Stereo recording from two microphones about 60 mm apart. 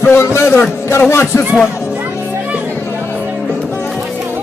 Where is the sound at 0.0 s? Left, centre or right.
Left.